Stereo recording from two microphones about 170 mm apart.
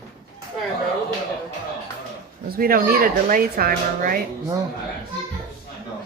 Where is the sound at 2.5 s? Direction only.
60° right (ahead or behind).